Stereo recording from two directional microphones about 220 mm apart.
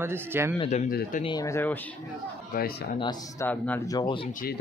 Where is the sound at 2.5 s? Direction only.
40° left (ahead or behind).